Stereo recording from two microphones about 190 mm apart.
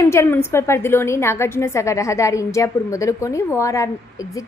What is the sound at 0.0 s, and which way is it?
A woman's voice, 15° left (ahead or behind).